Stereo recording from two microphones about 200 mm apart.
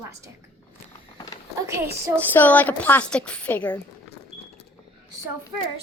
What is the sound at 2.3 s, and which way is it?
A woman's voice, 10° left (ahead or behind).